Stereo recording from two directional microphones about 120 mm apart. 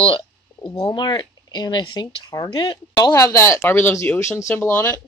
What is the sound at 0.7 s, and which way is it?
Speech, 35° left (ahead or behind).